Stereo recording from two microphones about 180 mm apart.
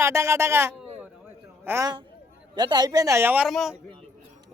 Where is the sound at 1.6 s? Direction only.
15° right (ahead or behind); by 3.8 s centre (ahead or behind).